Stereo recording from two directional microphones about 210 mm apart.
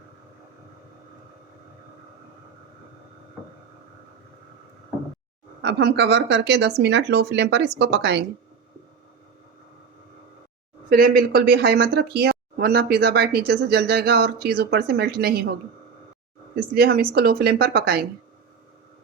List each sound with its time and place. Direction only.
5.6 s speech: 55° right (ahead or behind)
10.8 s speech: 45° right (ahead or behind)
16.7 s speech: 45° right (ahead or behind)